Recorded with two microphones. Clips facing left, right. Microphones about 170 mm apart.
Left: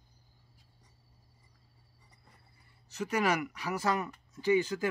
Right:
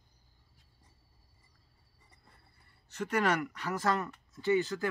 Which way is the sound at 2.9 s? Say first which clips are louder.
Even; 5° left (ahead or behind).